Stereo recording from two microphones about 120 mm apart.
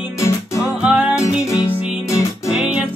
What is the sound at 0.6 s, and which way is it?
Music, 10° right (ahead or behind).